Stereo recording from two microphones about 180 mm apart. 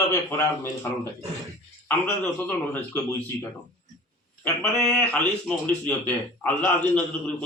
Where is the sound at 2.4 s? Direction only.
10° left (ahead or behind).